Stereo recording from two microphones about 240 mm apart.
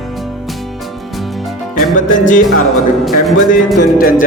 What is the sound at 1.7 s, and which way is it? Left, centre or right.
Music, left.